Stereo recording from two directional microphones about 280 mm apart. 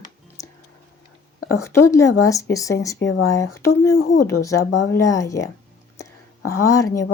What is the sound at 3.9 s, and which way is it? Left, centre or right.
Speech, left.